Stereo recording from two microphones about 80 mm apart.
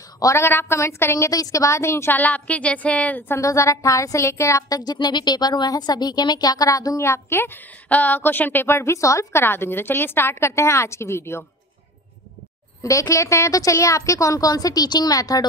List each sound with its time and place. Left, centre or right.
0.2 s a woman's voice: left
3.3 s a woman's voice: left
4.9 s a woman's voice: left
7.0 s a woman's voice: left
13.1 s a woman's voice: left